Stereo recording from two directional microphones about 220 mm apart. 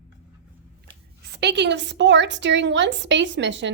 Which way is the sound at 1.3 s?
50° right (ahead or behind).